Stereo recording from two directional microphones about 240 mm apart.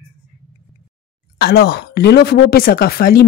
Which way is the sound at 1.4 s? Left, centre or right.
Left.